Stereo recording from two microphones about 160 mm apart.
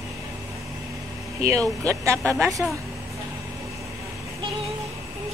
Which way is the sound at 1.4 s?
20° right (ahead or behind).